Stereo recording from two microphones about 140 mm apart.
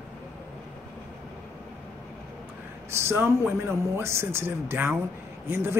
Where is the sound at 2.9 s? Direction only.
15° right (ahead or behind).